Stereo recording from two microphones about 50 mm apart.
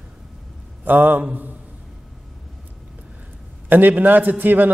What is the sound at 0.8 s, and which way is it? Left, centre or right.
Speech, right.